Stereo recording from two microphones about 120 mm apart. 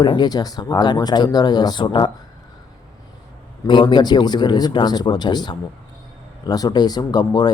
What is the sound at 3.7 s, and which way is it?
Speech, 40° left (ahead or behind).